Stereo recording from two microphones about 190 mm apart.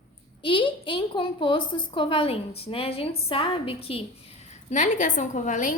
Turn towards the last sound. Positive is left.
turn(degrees=40)  # may be behind; listen again after turning